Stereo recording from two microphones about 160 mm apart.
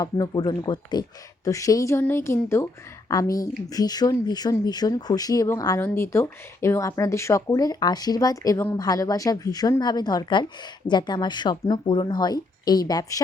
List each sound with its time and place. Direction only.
0.0 s speech: 25° left (ahead or behind)